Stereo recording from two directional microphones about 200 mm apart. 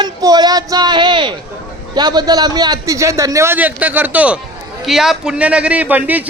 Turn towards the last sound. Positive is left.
turn(degrees=-10)  # may be behind; listen again after turning